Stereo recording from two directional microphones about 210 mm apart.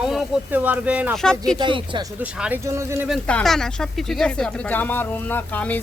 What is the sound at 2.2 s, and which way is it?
Speech, 5° right (ahead or behind).